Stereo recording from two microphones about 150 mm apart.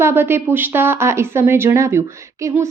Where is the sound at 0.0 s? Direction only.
15° right (ahead or behind).